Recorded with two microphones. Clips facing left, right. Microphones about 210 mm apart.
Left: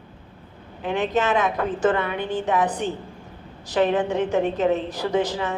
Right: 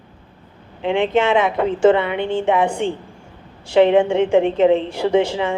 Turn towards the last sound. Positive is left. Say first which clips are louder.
# right 6 dB
turn(degrees=-25)  # may be behind; listen again after turning